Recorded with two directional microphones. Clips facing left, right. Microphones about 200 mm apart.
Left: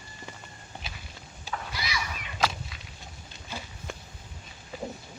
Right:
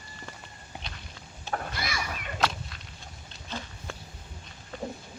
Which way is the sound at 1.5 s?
50° right (ahead or behind).